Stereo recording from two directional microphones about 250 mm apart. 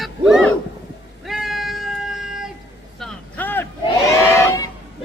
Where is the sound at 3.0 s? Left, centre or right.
Centre.